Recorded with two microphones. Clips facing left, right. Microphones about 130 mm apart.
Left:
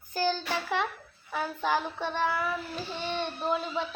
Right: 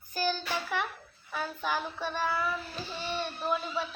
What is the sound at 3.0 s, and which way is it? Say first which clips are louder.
Speech: left 2 dB; 20° left (ahead or behind).